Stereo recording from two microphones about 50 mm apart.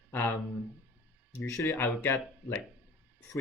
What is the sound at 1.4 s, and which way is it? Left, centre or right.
Speech, left.